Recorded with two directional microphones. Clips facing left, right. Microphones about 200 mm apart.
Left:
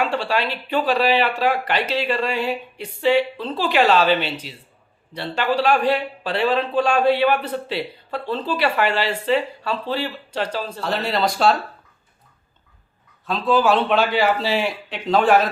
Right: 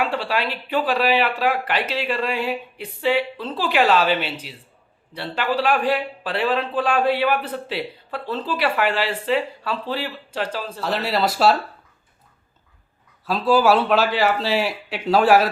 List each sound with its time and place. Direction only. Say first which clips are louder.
0.0 s speech: left 1 dB; 5° right (ahead or behind)
13.5 s a man's voice: right 1 dB; 10° right (ahead or behind)